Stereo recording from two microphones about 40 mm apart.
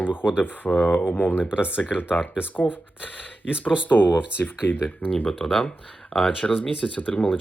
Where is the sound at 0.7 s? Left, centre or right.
Left.